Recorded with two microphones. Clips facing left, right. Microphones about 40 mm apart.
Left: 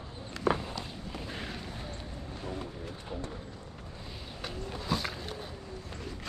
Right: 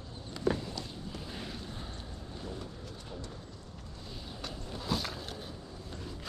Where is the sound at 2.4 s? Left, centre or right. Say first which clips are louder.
Left 4 dB; left.